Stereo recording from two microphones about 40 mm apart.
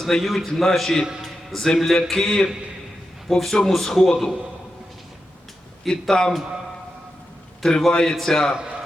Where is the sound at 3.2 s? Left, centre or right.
Centre.